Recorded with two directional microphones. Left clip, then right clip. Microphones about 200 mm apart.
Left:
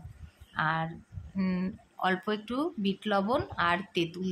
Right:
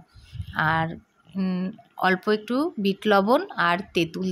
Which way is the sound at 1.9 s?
25° right (ahead or behind).